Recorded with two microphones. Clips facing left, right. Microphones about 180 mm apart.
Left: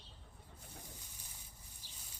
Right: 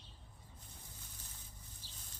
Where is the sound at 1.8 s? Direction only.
15° left (ahead or behind).